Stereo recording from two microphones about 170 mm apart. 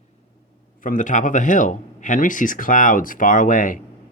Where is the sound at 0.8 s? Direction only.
50° left (ahead or behind).